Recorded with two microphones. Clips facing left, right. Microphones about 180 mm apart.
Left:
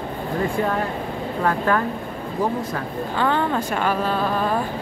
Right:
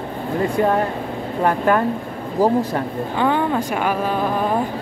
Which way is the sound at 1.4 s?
20° right (ahead or behind).